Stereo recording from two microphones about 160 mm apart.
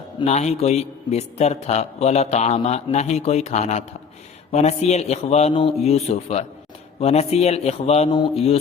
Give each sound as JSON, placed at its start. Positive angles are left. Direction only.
{"t": 0.3, "sound": "a man's voice", "side_deg": 45}